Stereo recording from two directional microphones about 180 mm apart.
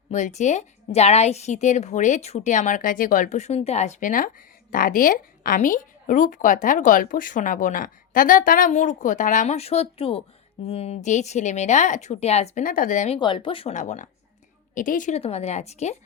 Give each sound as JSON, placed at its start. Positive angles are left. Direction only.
{"t": 0.1, "sound": "a woman's voice", "side_deg": 40}
{"t": 13.1, "sound": "speech", "side_deg": 25}